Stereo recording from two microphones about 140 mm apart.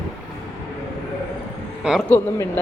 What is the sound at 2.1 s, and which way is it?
Speech, 15° left (ahead or behind).